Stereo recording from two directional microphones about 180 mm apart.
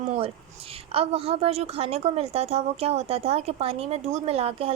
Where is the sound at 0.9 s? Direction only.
35° right (ahead or behind).